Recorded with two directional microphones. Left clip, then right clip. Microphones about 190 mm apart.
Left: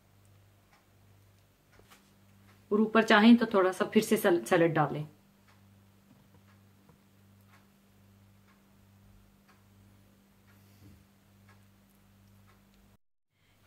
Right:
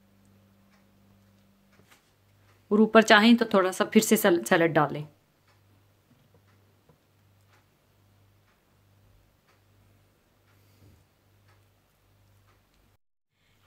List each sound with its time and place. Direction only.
2.7 s speech: 50° right (ahead or behind)